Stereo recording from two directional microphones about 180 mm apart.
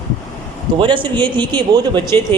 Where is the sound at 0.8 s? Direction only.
25° right (ahead or behind).